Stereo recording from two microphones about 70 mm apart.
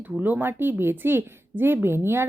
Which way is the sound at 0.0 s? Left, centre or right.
Right.